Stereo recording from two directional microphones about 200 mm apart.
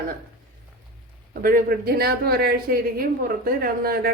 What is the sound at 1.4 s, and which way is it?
Speech, 50° right (ahead or behind).